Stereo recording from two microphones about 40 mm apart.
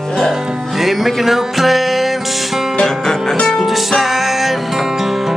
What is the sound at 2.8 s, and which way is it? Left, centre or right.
Music, centre.